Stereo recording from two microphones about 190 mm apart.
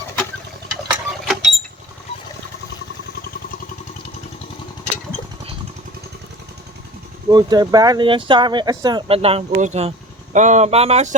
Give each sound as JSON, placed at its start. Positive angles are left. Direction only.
{"t": 0.9, "sound": "mechanisms", "side_deg": 0}
{"t": 7.3, "sound": "speech", "side_deg": -20}